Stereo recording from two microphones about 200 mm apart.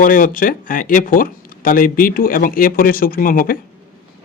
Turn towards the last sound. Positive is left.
turn(degrees=45)  # may be behind; listen again after turning